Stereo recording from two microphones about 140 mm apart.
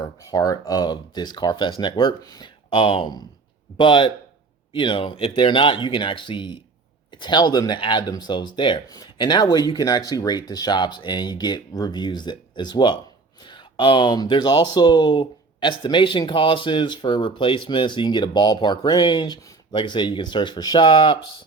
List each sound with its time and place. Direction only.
0.0 s speech: 25° left (ahead or behind)